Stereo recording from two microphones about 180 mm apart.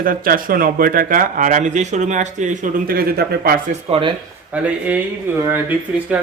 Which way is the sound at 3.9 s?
30° right (ahead or behind).